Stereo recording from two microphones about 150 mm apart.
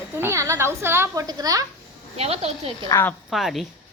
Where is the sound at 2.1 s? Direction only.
45° right (ahead or behind).